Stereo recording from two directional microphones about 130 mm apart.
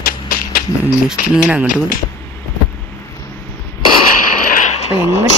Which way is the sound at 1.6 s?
90° left.